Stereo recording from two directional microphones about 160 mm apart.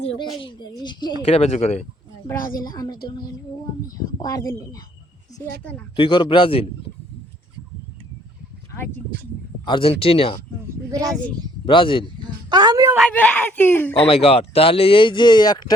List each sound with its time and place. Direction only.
0.0 s speech: 40° left (ahead or behind)
0.4 s speech: 25° left (ahead or behind)
1.3 s speech: 40° left (ahead or behind)
2.4 s a woman's voice: 60° left (ahead or behind)
2.6 s speech: 25° left (ahead or behind)
4.2 s speech: 20° left (ahead or behind)
6.0 s speech: 30° left (ahead or behind)
9.6 s speech: 30° left (ahead or behind)
10.9 s speech: 20° right (ahead or behind)
11.6 s speech: 30° left (ahead or behind)
12.0 s speech: 25° right (ahead or behind)
13.0 s speech: 5° left (ahead or behind)
14.0 s speech: 35° left (ahead or behind)